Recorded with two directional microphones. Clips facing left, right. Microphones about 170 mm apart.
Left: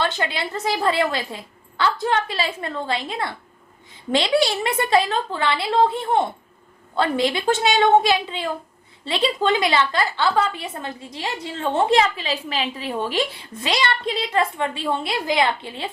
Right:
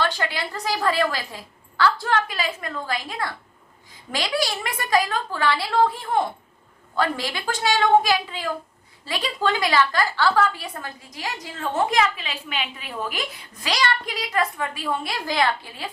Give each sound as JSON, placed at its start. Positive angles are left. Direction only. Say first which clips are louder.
{"t": 0.0, "sound": "a woman's voice", "louder": "left 1 dB", "side_deg": 20}